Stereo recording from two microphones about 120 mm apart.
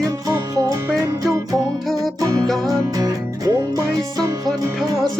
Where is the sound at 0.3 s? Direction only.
30° right (ahead or behind).